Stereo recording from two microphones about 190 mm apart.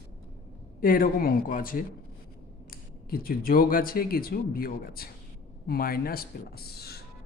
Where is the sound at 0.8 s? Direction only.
50° left (ahead or behind).